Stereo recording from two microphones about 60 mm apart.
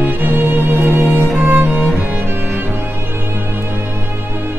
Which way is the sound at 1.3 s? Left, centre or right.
Right.